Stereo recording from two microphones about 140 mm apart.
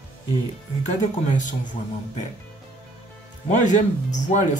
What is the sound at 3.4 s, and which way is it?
Speech, 60° left (ahead or behind).